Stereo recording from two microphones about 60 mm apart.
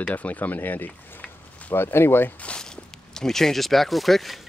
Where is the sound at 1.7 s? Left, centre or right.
Left.